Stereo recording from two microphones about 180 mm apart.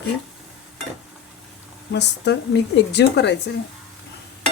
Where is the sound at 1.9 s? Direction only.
70° left (ahead or behind).